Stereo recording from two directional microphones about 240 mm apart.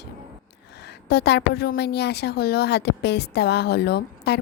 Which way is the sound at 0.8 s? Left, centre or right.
Left.